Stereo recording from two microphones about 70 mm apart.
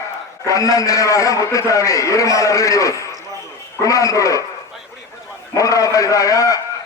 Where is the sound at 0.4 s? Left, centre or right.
Left.